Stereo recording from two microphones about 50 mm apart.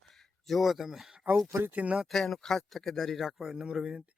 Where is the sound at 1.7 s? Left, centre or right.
Right.